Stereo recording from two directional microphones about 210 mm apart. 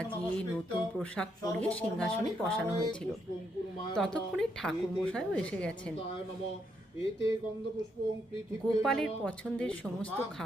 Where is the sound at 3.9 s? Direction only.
5° left (ahead or behind).